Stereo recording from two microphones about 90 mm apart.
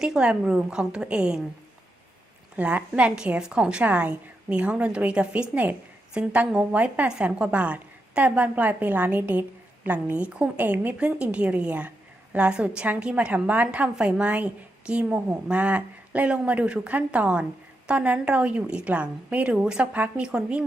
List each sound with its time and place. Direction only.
0.0 s a woman's voice: 10° right (ahead or behind)
2.6 s a woman's voice: 15° right (ahead or behind)